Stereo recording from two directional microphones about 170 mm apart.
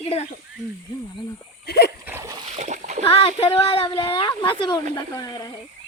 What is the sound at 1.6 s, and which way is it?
Speech, 70° left (ahead or behind).